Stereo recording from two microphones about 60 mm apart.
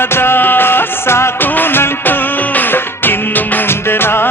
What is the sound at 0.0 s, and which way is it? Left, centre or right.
Music, left.